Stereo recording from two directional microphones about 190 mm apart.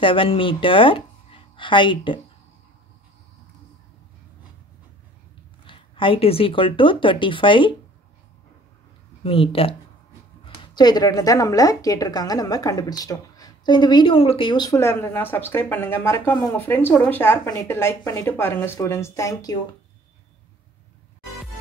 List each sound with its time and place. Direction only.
0.0 s a woman's voice: 25° left (ahead or behind)
5.7 s speech: 25° left (ahead or behind)
9.2 s a woman's voice: 30° left (ahead or behind)